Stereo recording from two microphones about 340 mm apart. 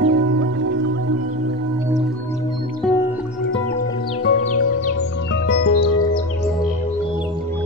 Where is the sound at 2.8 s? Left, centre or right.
Centre.